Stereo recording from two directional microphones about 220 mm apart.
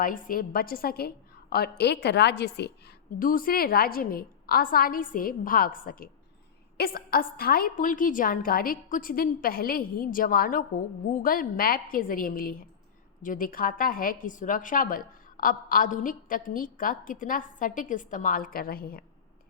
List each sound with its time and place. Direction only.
0.0 s a woman's voice: 40° left (ahead or behind)